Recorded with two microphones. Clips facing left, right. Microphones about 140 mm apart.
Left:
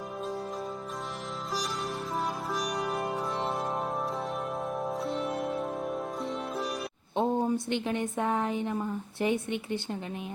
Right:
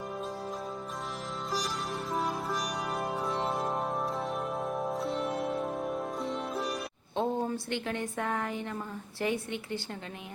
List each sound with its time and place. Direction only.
2.1 s music: centre (ahead or behind)
7.2 s a woman's voice: 20° left (ahead or behind)